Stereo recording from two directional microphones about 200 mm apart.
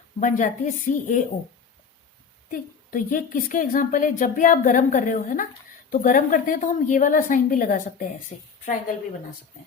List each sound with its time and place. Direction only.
0.2 s a woman's voice: 40° left (ahead or behind)
2.5 s a woman's voice: 45° left (ahead or behind)